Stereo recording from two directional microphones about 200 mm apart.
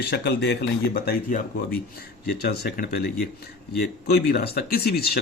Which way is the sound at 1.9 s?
50° left (ahead or behind).